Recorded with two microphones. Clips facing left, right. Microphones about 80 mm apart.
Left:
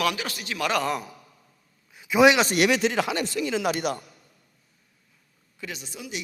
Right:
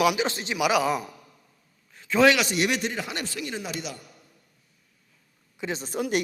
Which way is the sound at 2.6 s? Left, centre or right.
Left.